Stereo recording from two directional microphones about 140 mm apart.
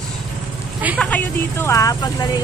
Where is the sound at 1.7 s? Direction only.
25° left (ahead or behind).